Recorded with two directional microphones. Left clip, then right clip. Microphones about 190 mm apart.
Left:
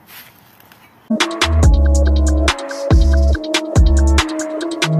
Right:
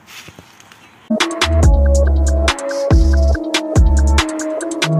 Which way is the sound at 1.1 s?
Centre (ahead or behind).